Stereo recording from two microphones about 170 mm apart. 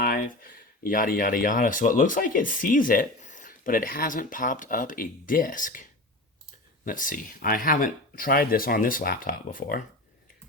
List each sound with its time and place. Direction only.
0.0 s speech: 60° left (ahead or behind)